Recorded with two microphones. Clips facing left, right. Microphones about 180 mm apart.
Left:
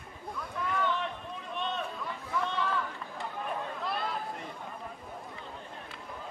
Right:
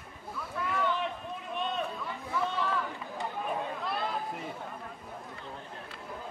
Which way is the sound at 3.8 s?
Centre (ahead or behind).